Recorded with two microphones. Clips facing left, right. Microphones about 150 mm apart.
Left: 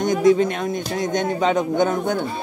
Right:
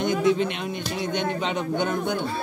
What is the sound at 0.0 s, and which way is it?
A man's voice, 40° left (ahead or behind).